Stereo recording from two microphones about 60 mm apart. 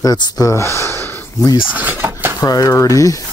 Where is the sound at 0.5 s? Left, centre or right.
Left.